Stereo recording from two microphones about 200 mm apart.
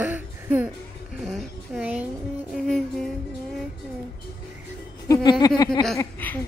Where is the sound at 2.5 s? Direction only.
5° left (ahead or behind).